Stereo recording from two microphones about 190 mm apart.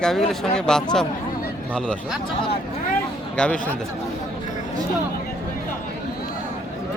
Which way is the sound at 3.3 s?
5° left (ahead or behind).